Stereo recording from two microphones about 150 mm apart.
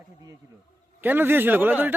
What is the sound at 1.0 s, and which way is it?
Speech, 15° right (ahead or behind).